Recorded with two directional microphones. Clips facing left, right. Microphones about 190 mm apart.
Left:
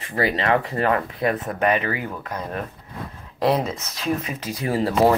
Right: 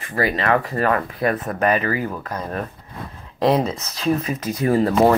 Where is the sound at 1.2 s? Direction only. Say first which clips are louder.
Right 3 dB; 40° right (ahead or behind).